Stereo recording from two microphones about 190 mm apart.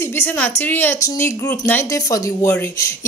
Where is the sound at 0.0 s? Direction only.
10° left (ahead or behind).